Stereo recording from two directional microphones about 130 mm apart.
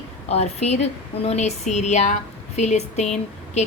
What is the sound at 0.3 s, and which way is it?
A woman's voice, 55° left (ahead or behind).